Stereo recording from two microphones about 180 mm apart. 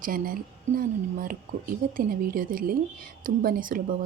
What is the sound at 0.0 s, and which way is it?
Speech, 50° right (ahead or behind).